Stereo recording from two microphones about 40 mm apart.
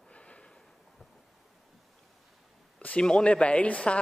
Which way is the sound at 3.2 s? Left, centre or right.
Left.